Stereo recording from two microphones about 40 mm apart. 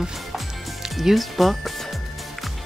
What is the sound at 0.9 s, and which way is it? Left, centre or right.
Speech, centre.